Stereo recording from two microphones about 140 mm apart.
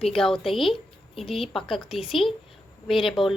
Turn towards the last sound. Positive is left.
turn(degrees=0)  # may be behind; listen again after turning